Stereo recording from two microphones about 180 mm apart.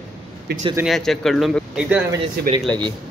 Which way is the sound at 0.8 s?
Centre (ahead or behind).